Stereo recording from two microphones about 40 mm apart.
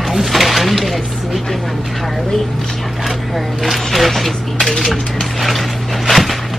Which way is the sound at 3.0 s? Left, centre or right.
Centre.